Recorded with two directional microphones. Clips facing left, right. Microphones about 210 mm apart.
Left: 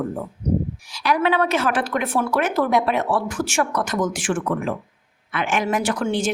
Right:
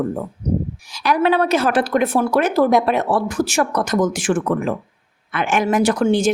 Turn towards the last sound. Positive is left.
turn(degrees=-40)  # may be behind; listen again after turning